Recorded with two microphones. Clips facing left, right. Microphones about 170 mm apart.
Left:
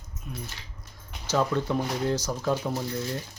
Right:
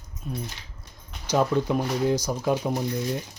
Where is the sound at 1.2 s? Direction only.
15° right (ahead or behind).